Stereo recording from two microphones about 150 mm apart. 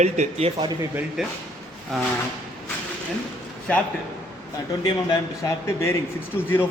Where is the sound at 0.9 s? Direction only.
5° right (ahead or behind).